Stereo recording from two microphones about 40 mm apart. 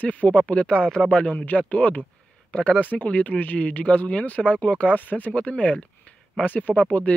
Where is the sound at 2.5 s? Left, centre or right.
Left.